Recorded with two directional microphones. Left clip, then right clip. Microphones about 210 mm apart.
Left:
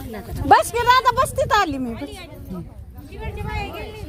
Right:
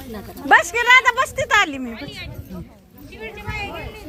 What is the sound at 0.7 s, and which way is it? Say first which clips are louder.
Speech: right 2 dB; 25° left (ahead or behind).